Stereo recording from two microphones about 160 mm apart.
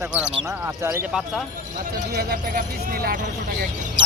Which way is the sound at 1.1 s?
Centre (ahead or behind).